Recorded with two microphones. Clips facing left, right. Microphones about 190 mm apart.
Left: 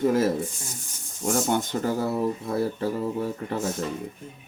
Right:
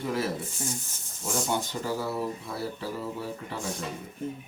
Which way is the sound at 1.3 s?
50° left (ahead or behind).